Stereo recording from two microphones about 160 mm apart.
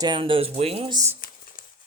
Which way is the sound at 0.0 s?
30° right (ahead or behind).